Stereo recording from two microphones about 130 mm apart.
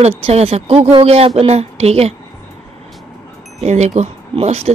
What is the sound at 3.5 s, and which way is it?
Speech, 60° right (ahead or behind).